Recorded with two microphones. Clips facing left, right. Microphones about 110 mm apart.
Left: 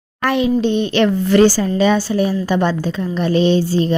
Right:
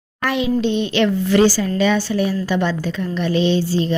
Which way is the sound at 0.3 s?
45° left (ahead or behind).